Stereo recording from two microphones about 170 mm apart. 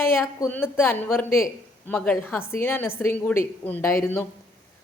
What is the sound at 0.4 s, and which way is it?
A woman's voice, 10° left (ahead or behind).